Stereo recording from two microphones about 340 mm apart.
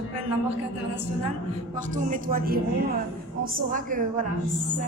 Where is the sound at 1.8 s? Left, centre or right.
Right.